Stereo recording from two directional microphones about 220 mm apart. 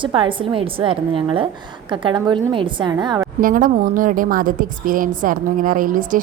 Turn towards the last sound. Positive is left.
turn(degrees=-35)  # may be behind; listen again after turning